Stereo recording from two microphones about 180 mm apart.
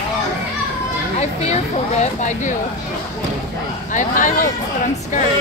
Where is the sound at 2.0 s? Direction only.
40° left (ahead or behind).